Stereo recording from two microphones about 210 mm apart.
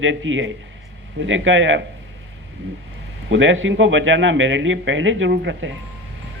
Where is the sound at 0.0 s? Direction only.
65° right (ahead or behind).